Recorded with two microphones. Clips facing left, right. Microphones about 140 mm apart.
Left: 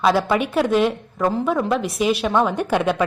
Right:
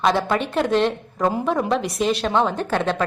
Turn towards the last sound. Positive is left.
turn(degrees=10)  # may be behind; listen again after turning